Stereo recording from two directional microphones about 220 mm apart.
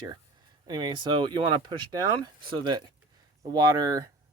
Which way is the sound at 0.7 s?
20° right (ahead or behind).